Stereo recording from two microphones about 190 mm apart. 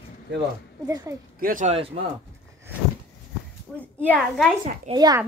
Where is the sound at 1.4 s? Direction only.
40° right (ahead or behind).